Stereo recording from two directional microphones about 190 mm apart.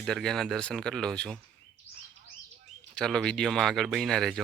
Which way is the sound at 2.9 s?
5° left (ahead or behind).